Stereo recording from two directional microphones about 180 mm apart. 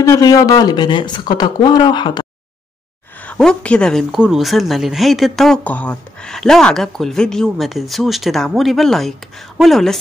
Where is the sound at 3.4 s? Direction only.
5° left (ahead or behind).